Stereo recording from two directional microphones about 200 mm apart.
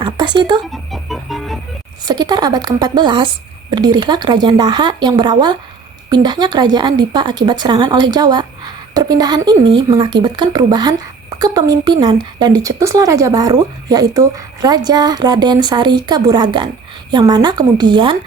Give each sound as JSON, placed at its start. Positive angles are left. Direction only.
{"t": 0.0, "sound": "speech", "side_deg": -20}
{"t": 0.7, "sound": "music", "side_deg": 0}
{"t": 2.0, "sound": "speech", "side_deg": -20}